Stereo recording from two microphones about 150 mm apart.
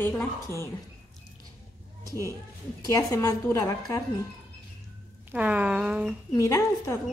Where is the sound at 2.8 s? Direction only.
25° left (ahead or behind).